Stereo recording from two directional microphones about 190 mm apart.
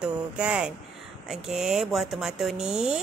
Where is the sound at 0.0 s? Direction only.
5° right (ahead or behind).